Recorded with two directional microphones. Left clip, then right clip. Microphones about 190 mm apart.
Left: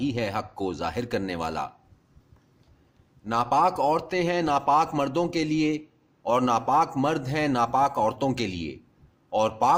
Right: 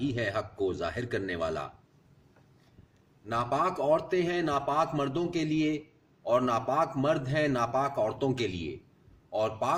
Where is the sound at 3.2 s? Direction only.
50° left (ahead or behind).